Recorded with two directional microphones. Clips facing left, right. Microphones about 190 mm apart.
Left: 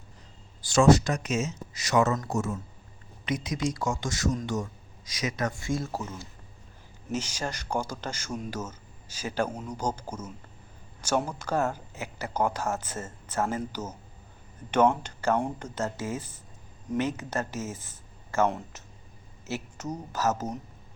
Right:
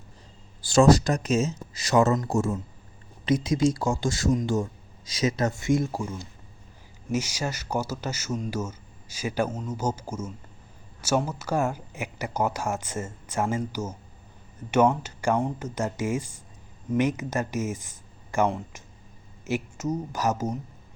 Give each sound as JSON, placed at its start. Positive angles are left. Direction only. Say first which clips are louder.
{"t": 0.6, "sound": "speech", "louder": "right 2 dB", "side_deg": -35}
{"t": 14.7, "sound": "speech", "louder": "right 2 dB", "side_deg": -10}